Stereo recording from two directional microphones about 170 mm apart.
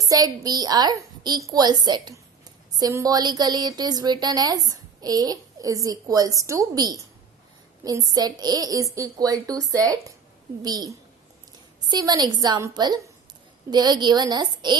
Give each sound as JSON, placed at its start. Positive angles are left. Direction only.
{"t": 0.0, "sound": "speech", "side_deg": -20}